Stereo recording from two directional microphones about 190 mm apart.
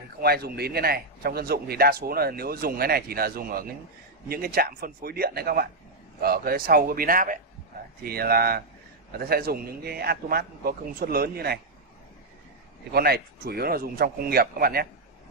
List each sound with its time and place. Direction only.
0.2 s a man's voice: 55° right (ahead or behind)
12.9 s a man's voice: 55° right (ahead or behind)